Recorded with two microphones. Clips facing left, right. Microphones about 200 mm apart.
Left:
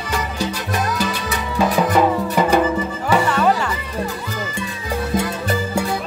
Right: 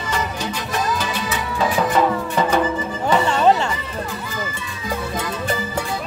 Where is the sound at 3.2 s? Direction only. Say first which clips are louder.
Right 4 dB; 25° right (ahead or behind).